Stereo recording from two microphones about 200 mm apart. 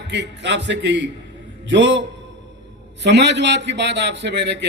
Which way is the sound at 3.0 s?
60° right (ahead or behind).